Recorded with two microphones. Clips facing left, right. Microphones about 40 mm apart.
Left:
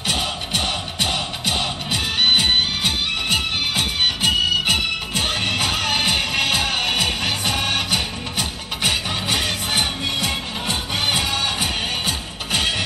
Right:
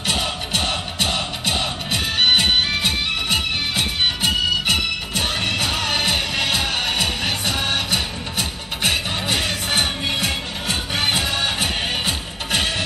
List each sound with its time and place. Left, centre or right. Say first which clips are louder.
0.0 s music: right 1 dB; centre
3.7 s music: even; centre
11.1 s music: even; centre